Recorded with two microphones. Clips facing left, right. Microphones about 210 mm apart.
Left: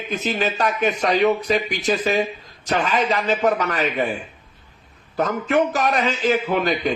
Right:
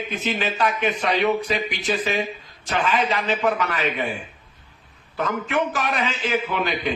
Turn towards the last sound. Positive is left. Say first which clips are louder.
# left 4 dB
turn(degrees=40)  # may be behind; listen again after turning